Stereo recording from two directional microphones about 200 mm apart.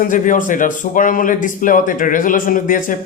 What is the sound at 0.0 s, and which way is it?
Speech, 40° left (ahead or behind).